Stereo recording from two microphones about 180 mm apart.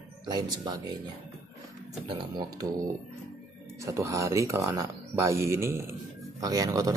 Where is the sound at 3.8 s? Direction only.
15° right (ahead or behind).